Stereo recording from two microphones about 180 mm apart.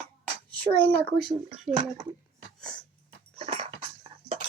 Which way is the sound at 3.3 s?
35° right (ahead or behind).